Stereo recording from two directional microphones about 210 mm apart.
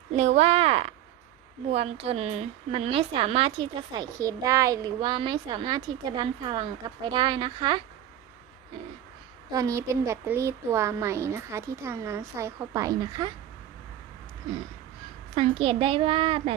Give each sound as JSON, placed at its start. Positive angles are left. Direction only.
{"t": 0.2, "sound": "a child's voice", "side_deg": -30}
{"t": 9.5, "sound": "a woman's voice", "side_deg": -15}
{"t": 15.4, "sound": "a child's voice", "side_deg": -25}